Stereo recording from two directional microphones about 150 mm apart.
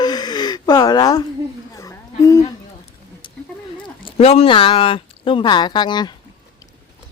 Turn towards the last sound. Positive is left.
turn(degrees=30)  # may be behind; listen again after turning